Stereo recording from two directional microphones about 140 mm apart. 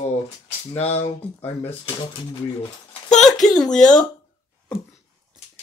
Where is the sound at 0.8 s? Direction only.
50° left (ahead or behind).